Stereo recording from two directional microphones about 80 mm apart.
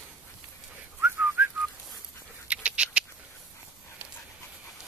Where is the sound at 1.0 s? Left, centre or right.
Right.